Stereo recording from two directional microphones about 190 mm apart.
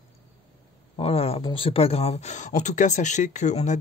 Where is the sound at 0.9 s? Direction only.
30° left (ahead or behind).